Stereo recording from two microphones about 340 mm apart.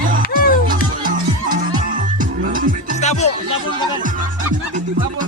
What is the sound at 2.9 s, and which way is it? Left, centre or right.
Music, centre.